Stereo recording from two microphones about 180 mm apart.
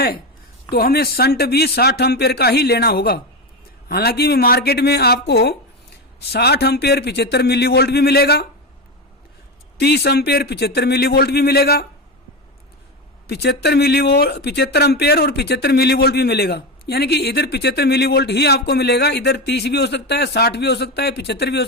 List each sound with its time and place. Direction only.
0.7 s speech: 55° left (ahead or behind)
9.7 s speech: 65° left (ahead or behind)
13.2 s speech: 65° left (ahead or behind)